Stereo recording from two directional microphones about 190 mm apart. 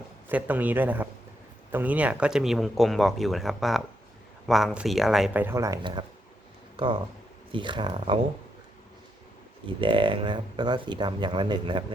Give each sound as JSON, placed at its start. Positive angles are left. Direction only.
{"t": 0.3, "sound": "a man's voice", "side_deg": -10}
{"t": 9.8, "sound": "speech", "side_deg": -25}